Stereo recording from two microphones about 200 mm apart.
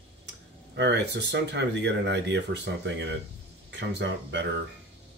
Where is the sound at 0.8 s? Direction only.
60° right (ahead or behind).